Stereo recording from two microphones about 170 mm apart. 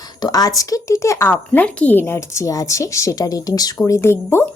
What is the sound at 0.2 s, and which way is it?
Speech, 20° left (ahead or behind).